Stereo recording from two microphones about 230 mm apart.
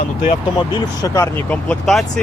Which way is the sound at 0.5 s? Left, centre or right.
Centre.